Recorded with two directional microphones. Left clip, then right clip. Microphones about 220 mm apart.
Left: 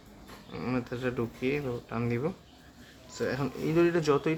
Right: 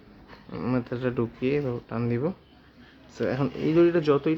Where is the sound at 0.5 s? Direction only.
25° right (ahead or behind).